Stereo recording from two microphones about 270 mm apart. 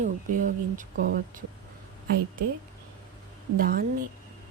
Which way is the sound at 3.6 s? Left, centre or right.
Right.